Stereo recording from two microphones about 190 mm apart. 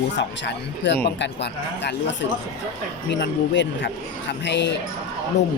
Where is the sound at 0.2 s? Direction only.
70° left (ahead or behind).